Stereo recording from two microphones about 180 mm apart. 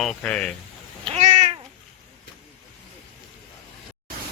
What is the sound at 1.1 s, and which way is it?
Cat, 40° right (ahead or behind).